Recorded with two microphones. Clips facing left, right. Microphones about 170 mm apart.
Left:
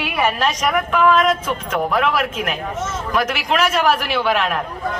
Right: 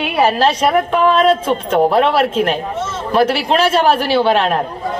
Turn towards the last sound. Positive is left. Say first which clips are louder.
# right 6 dB
turn(degrees=-30)  # may be behind; listen again after turning